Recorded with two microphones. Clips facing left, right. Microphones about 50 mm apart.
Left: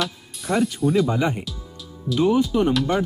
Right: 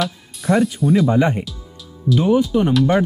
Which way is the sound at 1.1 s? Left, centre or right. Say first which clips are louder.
Right 6 dB; right.